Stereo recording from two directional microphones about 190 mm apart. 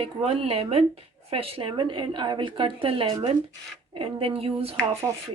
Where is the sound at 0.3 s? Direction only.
30° right (ahead or behind).